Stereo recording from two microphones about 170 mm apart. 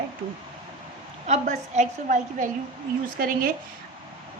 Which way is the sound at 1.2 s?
45° right (ahead or behind).